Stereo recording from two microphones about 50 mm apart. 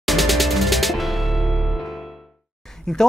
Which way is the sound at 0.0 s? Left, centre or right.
Centre.